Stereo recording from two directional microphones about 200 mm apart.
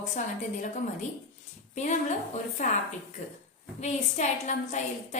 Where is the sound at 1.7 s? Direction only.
35° left (ahead or behind).